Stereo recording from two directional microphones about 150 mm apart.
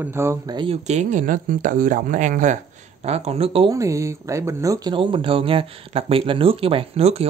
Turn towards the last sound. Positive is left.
turn(degrees=-40)  # may be behind; listen again after turning